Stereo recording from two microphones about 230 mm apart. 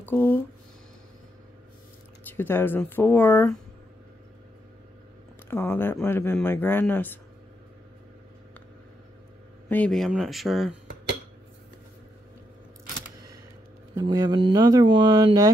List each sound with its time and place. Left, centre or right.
0.0 s speech: centre
2.2 s speech: centre
5.5 s speech: centre
9.7 s speech: centre
13.9 s speech: centre